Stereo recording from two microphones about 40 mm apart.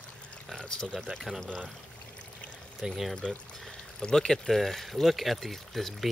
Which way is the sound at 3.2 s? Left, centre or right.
Centre.